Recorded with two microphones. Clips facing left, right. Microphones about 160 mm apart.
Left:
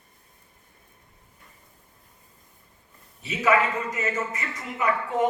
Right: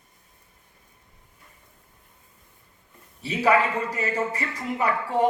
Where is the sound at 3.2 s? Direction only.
35° right (ahead or behind).